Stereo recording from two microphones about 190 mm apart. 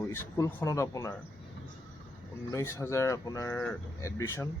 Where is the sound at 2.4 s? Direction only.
15° left (ahead or behind).